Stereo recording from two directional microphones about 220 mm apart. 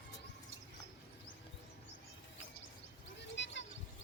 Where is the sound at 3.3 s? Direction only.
55° left (ahead or behind).